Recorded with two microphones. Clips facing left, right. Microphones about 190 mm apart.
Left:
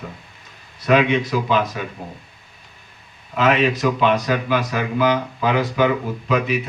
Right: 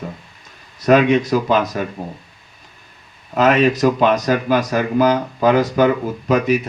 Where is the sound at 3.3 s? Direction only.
40° right (ahead or behind).